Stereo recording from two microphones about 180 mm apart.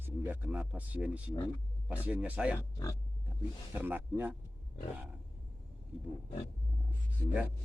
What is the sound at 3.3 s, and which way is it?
Speech, 10° right (ahead or behind).